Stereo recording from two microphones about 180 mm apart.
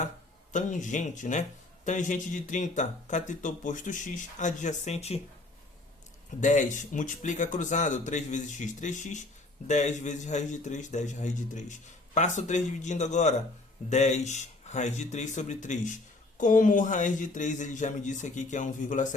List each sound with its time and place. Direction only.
0.5 s a man's voice: 45° left (ahead or behind)
6.4 s a man's voice: 45° left (ahead or behind)